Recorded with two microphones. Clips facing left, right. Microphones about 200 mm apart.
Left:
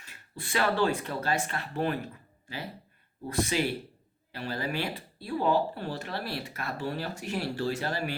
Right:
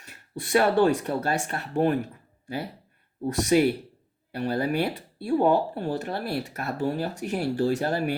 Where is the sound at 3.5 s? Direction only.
50° right (ahead or behind).